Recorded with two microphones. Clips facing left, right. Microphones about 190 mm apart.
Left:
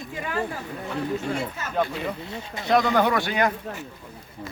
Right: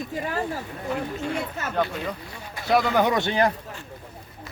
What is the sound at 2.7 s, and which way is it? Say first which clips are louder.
Speech: even; 5° right (ahead or behind).